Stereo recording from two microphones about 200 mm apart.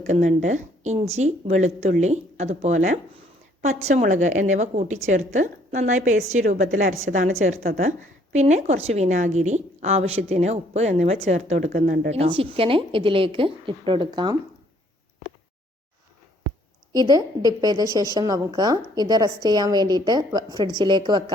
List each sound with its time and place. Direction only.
0.1 s a woman's voice: 35° right (ahead or behind); by 14.3 s 20° right (ahead or behind)
16.9 s a woman's voice: 20° right (ahead or behind)